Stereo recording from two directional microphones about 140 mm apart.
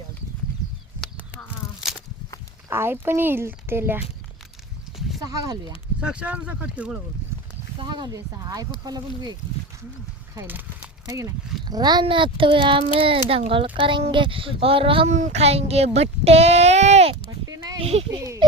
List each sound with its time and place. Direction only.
2.6 s speech: 15° right (ahead or behind)
5.2 s speech: 25° right (ahead or behind)
6.0 s speech: 5° right (ahead or behind)
7.8 s speech: 30° right (ahead or behind)
11.0 s speech: 25° right (ahead or behind); by 15.1 s 40° right (ahead or behind)
15.1 s speech: 55° right (ahead or behind)
17.2 s a sound: 25° right (ahead or behind)
17.8 s speech: 45° right (ahead or behind)